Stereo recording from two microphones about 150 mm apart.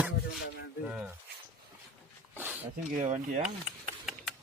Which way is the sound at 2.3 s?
15° right (ahead or behind).